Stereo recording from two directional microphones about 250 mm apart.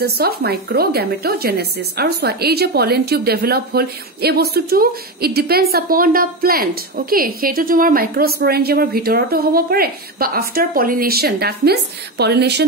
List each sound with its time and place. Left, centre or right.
0.0 s a woman's voice: right